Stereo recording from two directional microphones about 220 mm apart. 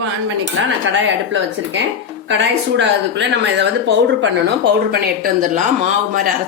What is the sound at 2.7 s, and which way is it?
Speech, 55° right (ahead or behind).